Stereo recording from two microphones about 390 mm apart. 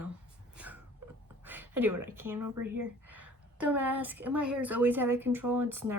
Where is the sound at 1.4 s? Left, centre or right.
Centre.